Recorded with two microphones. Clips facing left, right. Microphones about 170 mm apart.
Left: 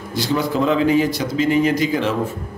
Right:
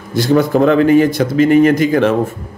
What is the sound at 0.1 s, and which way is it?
A man's voice, 50° right (ahead or behind).